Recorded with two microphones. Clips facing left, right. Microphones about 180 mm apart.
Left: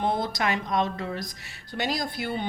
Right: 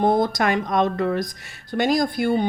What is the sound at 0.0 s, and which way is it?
Speech, 45° right (ahead or behind).